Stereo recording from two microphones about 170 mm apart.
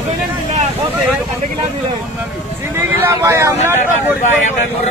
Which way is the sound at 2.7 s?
15° right (ahead or behind).